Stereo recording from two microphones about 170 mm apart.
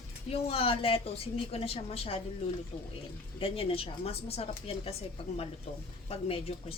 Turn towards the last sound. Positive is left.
turn(degrees=35)  # may be behind; listen again after turning